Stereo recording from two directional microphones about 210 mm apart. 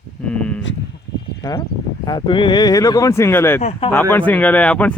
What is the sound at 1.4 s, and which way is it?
Speech, 20° left (ahead or behind).